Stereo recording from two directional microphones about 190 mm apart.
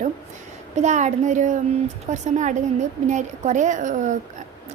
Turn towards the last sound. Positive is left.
turn(degrees=-40)  # may be behind; listen again after turning